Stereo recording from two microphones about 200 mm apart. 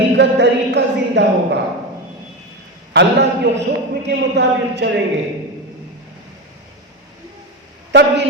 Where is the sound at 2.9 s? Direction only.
60° right (ahead or behind).